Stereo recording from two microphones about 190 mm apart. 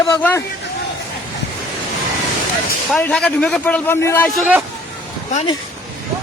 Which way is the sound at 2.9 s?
5° left (ahead or behind).